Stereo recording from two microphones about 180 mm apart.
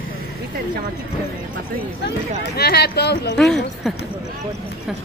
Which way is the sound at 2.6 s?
65° left (ahead or behind).